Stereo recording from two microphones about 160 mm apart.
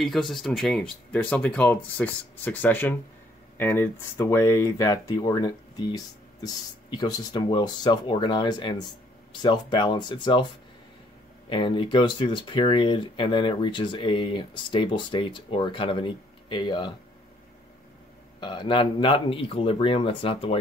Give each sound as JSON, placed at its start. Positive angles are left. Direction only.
{"t": 0.0, "sound": "speech", "side_deg": 0}
{"t": 11.4, "sound": "speech", "side_deg": 30}
{"t": 18.4, "sound": "speech", "side_deg": 30}